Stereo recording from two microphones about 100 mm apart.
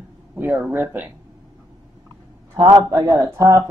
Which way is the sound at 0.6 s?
15° right (ahead or behind).